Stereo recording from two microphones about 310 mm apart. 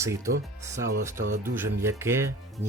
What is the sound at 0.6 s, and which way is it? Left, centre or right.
Speech, centre.